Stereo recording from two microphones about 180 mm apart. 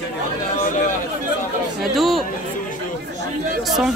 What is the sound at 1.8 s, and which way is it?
Speech, centre (ahead or behind).